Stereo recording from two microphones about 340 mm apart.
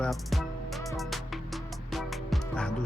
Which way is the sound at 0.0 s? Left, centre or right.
Centre.